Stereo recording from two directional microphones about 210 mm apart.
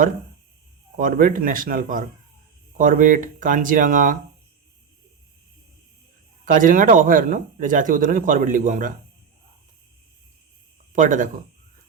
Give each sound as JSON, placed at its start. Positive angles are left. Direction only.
{"t": 0.9, "sound": "speech", "side_deg": -40}
{"t": 6.4, "sound": "speech", "side_deg": -40}
{"t": 10.9, "sound": "speech", "side_deg": -40}